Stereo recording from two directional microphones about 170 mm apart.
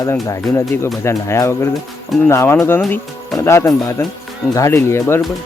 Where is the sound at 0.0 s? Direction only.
20° left (ahead or behind).